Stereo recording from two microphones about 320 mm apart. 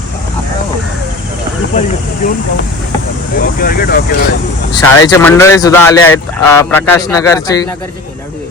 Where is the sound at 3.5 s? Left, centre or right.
Left.